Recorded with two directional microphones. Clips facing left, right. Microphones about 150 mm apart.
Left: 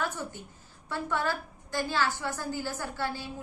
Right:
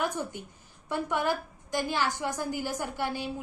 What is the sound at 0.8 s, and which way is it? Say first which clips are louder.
A woman's voice: right 2 dB; 15° right (ahead or behind).